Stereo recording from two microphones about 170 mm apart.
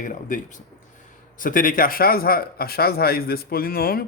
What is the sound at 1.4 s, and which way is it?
Speech, 55° left (ahead or behind).